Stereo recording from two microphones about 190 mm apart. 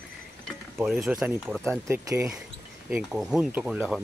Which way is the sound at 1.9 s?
15° right (ahead or behind).